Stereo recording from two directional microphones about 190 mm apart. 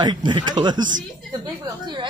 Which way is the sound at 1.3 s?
20° right (ahead or behind).